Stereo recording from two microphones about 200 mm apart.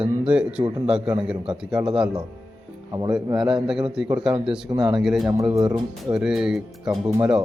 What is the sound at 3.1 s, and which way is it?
Speech, 5° right (ahead or behind).